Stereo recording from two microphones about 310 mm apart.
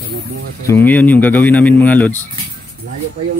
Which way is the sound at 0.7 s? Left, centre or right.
Centre.